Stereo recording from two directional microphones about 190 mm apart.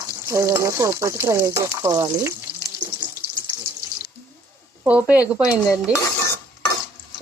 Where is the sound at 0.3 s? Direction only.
15° right (ahead or behind).